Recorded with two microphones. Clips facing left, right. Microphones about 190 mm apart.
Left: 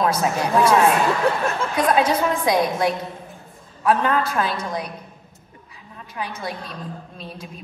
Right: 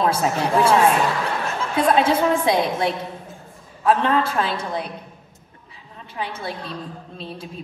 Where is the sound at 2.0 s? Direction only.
25° right (ahead or behind).